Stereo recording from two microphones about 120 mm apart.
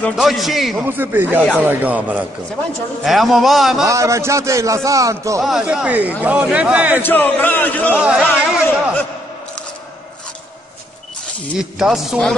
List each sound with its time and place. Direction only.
0.1 s speech: centre (ahead or behind)
0.8 s speech: 15° right (ahead or behind)
3.0 s speech: centre (ahead or behind)
3.8 s a man's voice: 25° right (ahead or behind)
5.4 s speech: 5° right (ahead or behind)
7.0 s speech: 15° left (ahead or behind)
8.0 s speech: 10° right (ahead or behind)
11.5 s speech: 5° right (ahead or behind)